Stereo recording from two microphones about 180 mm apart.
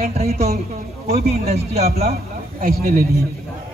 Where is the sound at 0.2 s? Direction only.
35° right (ahead or behind).